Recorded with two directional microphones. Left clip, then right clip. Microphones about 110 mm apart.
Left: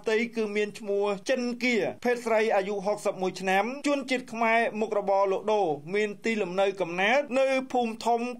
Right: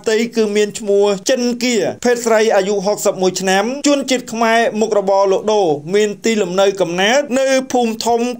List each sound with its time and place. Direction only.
0.0 s speech: 30° right (ahead or behind)